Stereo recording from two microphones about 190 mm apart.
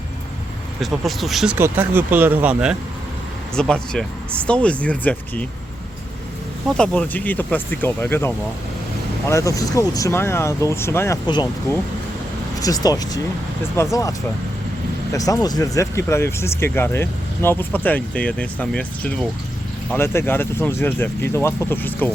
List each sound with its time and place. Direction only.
0.8 s speech: centre (ahead or behind)
1.5 s speech: 10° right (ahead or behind); by 5.5 s 10° left (ahead or behind)
6.7 s speech: 5° left (ahead or behind)